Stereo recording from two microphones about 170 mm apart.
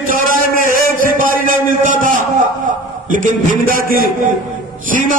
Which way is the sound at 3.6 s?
55° right (ahead or behind).